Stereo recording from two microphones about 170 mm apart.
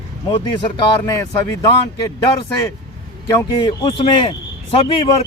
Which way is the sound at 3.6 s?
30° left (ahead or behind).